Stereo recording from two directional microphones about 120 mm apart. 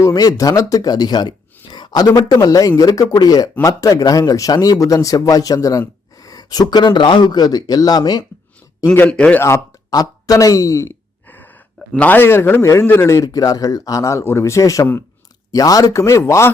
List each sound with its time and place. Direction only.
0.0 s speech: 30° left (ahead or behind)
8.9 s speech: 10° left (ahead or behind)
9.4 s speech: 25° left (ahead or behind)